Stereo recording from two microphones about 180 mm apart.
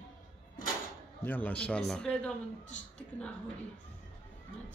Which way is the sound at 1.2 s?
10° left (ahead or behind).